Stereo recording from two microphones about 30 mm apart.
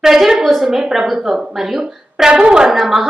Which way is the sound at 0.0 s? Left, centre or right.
Centre.